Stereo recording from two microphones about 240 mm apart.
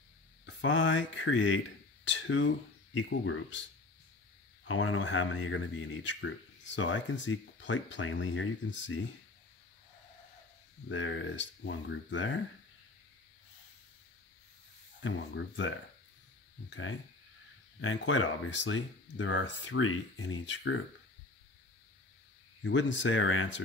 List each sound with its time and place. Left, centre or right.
0.6 s speech: left
4.6 s speech: left
10.9 s speech: left
15.0 s speech: left
17.7 s speech: left
22.6 s speech: left